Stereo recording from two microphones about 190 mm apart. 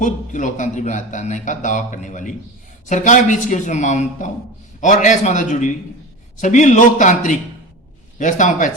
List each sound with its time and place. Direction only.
0.0 s a man's voice: 40° left (ahead or behind)